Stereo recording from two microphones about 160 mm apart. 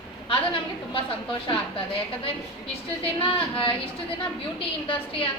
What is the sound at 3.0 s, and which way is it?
A woman's voice, 35° left (ahead or behind).